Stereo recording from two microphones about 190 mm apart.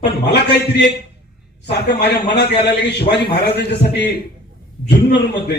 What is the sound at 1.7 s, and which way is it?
A man's voice, 60° left (ahead or behind).